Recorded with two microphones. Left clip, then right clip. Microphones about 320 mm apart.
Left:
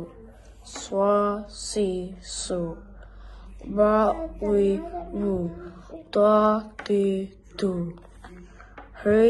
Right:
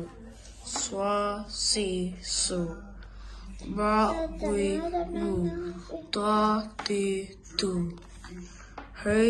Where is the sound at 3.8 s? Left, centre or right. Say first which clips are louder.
Left 6 dB; centre.